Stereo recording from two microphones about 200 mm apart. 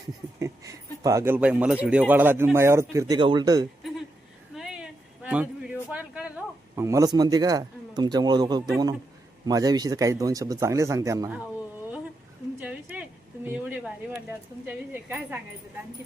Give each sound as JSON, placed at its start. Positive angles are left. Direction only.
{"t": 0.3, "sound": "speech", "side_deg": -15}
{"t": 4.5, "sound": "a sound", "side_deg": -5}
{"t": 5.9, "sound": "speech", "side_deg": -5}
{"t": 12.6, "sound": "speech", "side_deg": -5}